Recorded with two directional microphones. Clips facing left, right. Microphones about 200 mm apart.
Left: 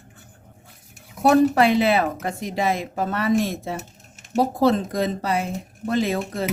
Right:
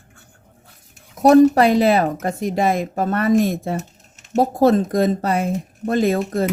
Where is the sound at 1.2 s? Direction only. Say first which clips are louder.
Right 5 dB; 40° right (ahead or behind).